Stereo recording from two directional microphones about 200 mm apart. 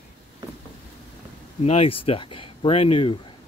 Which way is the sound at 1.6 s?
30° left (ahead or behind).